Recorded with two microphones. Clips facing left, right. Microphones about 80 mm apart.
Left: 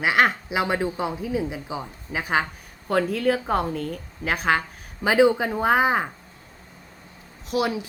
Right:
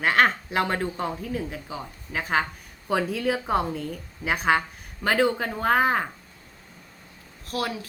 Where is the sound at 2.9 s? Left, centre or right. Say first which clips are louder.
Left 3 dB; centre.